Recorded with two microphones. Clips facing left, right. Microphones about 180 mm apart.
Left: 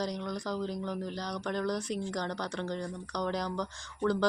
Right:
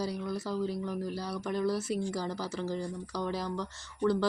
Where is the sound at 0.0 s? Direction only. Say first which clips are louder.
Even; 5° right (ahead or behind).